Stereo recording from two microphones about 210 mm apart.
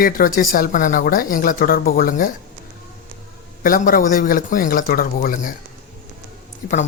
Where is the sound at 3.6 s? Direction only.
40° left (ahead or behind).